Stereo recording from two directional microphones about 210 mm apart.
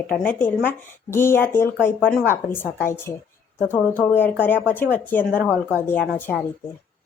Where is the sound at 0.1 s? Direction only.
10° left (ahead or behind).